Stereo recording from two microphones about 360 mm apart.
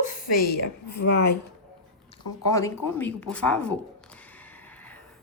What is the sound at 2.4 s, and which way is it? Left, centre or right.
A woman's voice, centre.